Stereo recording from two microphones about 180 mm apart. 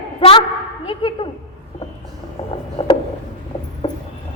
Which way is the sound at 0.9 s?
30° left (ahead or behind).